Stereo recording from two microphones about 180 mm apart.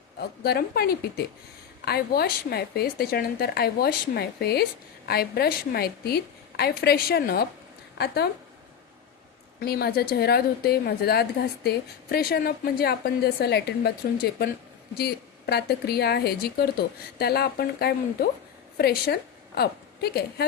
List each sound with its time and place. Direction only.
0.2 s a woman's voice: 60° left (ahead or behind)
9.6 s a woman's voice: 60° left (ahead or behind)